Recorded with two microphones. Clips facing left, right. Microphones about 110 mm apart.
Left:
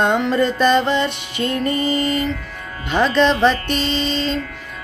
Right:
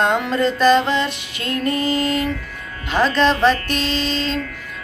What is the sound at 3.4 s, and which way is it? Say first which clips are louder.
Music: even; centre (ahead or behind).